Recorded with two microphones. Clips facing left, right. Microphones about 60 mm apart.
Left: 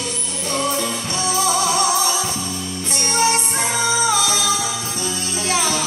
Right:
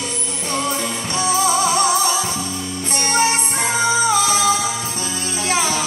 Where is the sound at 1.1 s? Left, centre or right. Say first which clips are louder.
Right 3 dB; right.